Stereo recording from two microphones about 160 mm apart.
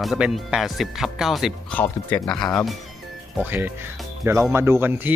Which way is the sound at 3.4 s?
10° right (ahead or behind).